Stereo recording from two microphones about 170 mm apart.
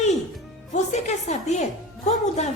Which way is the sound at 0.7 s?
40° left (ahead or behind).